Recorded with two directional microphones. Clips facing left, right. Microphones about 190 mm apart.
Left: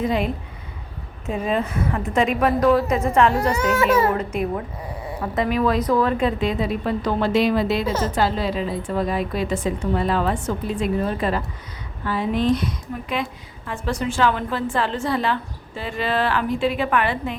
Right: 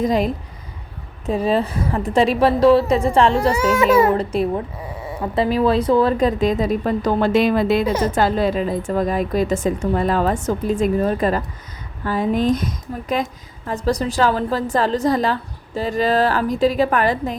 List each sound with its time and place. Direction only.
0.0 s a woman's voice: 40° right (ahead or behind)
1.3 s a woman's voice: 35° right (ahead or behind); by 7.9 s 50° right (ahead or behind)
7.9 s a woman's voice: 15° right (ahead or behind)
8.1 s a woman's voice: 50° right (ahead or behind)